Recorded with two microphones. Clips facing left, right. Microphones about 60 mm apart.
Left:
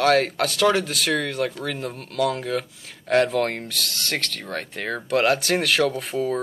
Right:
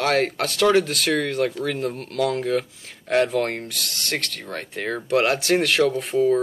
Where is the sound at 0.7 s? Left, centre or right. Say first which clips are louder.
Right 3 dB; right.